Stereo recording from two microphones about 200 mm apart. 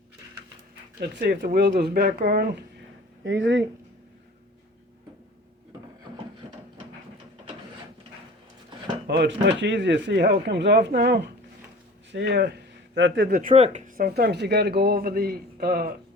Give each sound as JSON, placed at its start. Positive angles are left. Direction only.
{"t": 0.9, "sound": "speech", "side_deg": -55}
{"t": 3.2, "sound": "speech", "side_deg": -65}
{"t": 9.0, "sound": "a man's voice", "side_deg": -60}
{"t": 13.2, "sound": "speech", "side_deg": -45}